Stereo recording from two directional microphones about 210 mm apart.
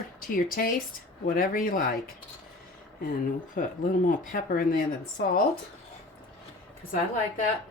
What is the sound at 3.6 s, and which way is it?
Speech, 40° left (ahead or behind).